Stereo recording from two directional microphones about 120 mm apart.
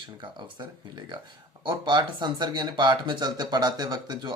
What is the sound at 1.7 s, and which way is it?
Speech, 40° right (ahead or behind).